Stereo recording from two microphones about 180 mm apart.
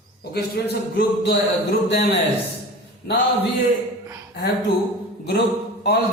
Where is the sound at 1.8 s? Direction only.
65° left (ahead or behind).